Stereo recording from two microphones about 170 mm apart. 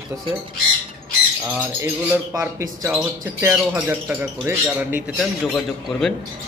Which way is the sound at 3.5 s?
Centre (ahead or behind).